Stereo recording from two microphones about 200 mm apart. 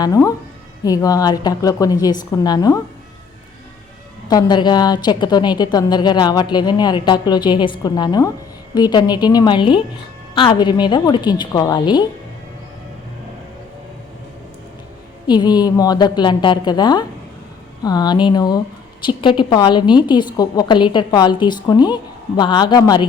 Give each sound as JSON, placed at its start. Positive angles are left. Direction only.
{"t": 0.0, "sound": "a woman's voice", "side_deg": 15}
{"t": 4.3, "sound": "a woman's voice", "side_deg": 20}
{"t": 15.3, "sound": "a woman's voice", "side_deg": 20}